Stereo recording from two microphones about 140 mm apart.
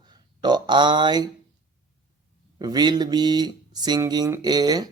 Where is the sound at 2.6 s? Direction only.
30° right (ahead or behind).